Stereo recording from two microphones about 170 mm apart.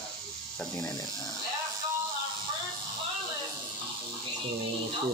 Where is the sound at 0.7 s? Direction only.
20° left (ahead or behind).